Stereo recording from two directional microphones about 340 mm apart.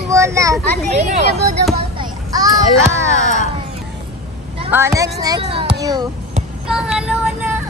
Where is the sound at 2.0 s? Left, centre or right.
Centre.